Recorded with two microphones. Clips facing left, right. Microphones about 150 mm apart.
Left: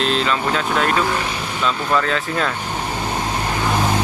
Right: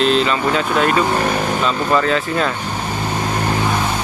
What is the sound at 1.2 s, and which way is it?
Vehicle, 50° right (ahead or behind).